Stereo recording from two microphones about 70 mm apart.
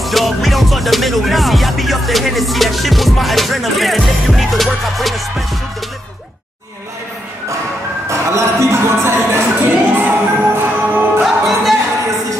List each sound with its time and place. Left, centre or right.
0.0 s music: centre
8.1 s music: right
11.2 s music: centre